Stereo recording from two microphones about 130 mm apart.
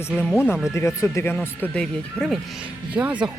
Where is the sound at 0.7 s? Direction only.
20° left (ahead or behind).